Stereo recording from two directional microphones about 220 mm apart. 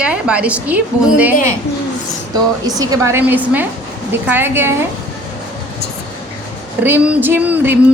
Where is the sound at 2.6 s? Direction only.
15° right (ahead or behind).